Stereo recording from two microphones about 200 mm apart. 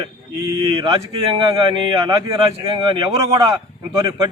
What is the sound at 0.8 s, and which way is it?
A man's voice, 25° right (ahead or behind).